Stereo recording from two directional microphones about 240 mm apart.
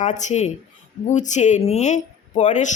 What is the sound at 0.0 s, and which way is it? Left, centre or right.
Speech, left.